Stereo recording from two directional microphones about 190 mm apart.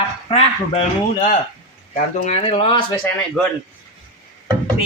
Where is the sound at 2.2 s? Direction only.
30° left (ahead or behind).